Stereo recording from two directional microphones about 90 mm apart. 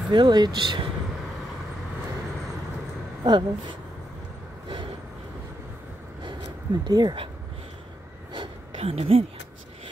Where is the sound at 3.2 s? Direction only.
60° right (ahead or behind).